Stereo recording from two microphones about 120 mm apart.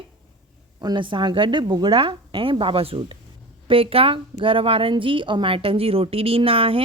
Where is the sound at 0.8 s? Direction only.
40° right (ahead or behind).